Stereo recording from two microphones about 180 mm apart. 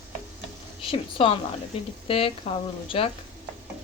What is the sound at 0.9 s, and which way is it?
A woman's voice, 30° left (ahead or behind).